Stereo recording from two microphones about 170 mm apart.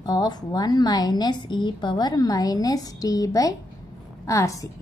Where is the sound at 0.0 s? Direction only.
25° left (ahead or behind).